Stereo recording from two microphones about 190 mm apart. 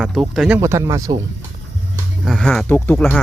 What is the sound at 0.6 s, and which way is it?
Speech, 15° right (ahead or behind).